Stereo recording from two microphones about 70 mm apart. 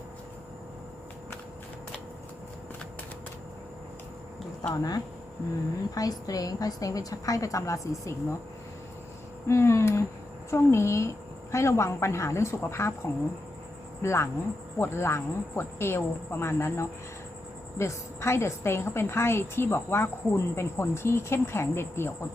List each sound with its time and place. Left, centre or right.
4.7 s a woman's voice: left
9.5 s a woman's voice: left